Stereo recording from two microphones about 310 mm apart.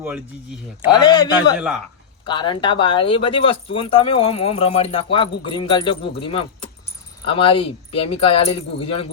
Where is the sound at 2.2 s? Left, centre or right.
Centre.